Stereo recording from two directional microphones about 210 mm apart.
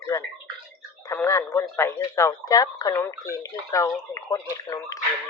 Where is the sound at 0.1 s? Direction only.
15° left (ahead or behind).